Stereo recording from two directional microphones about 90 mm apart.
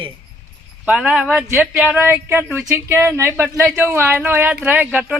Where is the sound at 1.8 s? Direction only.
20° right (ahead or behind).